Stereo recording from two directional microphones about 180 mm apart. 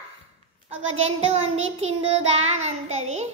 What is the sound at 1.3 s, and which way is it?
Child singing, 35° right (ahead or behind).